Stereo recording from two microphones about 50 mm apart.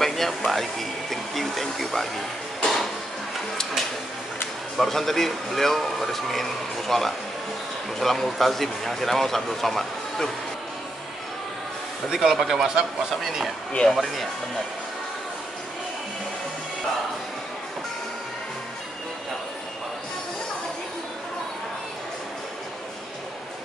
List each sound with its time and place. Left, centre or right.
0.0 s speech: centre
2.6 s a sound: centre
4.7 s speech: centre
12.1 s speech: centre